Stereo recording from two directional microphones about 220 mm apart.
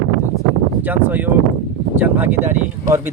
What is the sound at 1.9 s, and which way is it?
Speech, 10° right (ahead or behind).